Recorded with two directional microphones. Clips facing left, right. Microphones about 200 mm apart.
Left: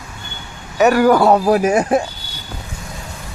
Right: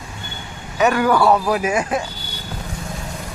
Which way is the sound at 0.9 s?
35° left (ahead or behind).